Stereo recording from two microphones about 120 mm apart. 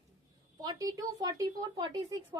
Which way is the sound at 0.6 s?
30° right (ahead or behind).